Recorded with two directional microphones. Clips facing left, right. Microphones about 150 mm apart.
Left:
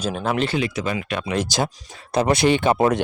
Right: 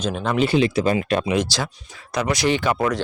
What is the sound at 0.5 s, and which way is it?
Speech, 30° right (ahead or behind).